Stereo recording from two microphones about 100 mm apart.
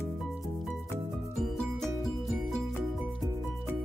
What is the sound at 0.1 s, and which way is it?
Music, centre (ahead or behind).